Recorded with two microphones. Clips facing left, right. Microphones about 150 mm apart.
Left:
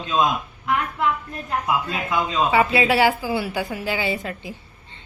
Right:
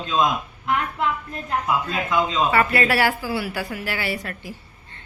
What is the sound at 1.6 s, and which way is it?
A woman's voice, 10° left (ahead or behind).